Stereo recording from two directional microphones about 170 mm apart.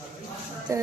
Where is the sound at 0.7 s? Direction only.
20° right (ahead or behind).